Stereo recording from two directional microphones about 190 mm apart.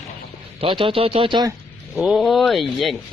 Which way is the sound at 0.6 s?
30° right (ahead or behind).